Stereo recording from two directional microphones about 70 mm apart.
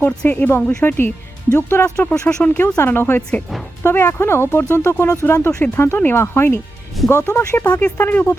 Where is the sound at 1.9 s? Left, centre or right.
Centre.